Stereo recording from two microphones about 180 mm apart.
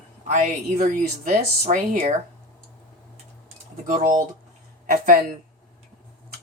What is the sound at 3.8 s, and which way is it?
Speech, 45° right (ahead or behind).